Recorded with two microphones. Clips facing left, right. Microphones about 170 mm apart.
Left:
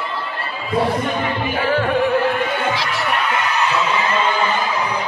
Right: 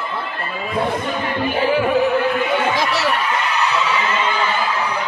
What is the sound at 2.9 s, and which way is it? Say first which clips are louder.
Snicker: right 3 dB; 75° right (ahead or behind).